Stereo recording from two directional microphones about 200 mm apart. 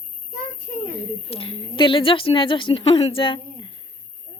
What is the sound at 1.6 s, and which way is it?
Speech, 25° left (ahead or behind).